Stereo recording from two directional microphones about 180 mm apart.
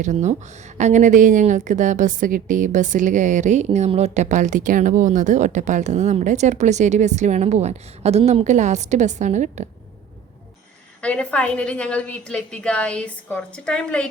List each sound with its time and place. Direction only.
0.0 s speech: 40° right (ahead or behind)
11.0 s a woman's voice: 5° left (ahead or behind)